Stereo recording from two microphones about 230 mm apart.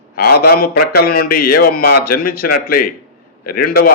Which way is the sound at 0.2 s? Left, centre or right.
Left.